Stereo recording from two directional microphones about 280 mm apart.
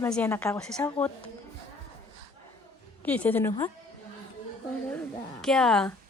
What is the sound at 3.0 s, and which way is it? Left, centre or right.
Speech, centre.